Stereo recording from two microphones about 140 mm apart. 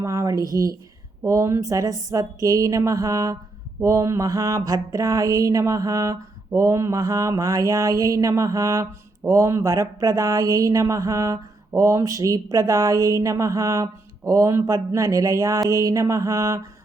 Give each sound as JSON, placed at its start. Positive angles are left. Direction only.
{"t": 0.0, "sound": "speech", "side_deg": -20}
{"t": 1.2, "sound": "mantra", "side_deg": -20}